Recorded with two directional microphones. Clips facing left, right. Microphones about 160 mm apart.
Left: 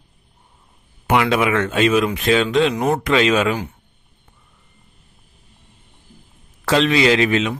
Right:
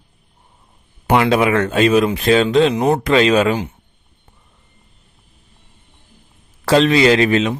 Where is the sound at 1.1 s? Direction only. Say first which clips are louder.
Right 3 dB; 35° right (ahead or behind).